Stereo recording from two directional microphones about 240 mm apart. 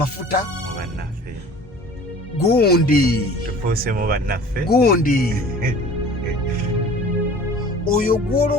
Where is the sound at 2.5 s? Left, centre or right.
Left.